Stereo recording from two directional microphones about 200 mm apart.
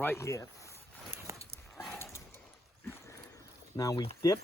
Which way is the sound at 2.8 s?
10° left (ahead or behind).